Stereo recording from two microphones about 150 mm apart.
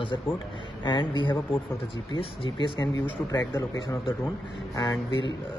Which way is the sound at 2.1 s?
35° left (ahead or behind).